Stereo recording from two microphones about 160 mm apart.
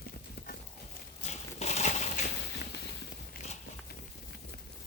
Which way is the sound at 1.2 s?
45° left (ahead or behind).